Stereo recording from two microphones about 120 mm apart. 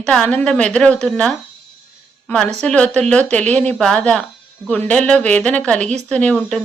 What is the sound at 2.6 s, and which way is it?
A woman's voice, 10° left (ahead or behind).